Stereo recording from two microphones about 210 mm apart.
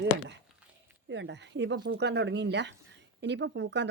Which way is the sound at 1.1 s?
55° right (ahead or behind).